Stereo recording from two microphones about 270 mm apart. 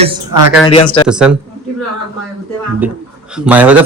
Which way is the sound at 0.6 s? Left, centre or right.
Left.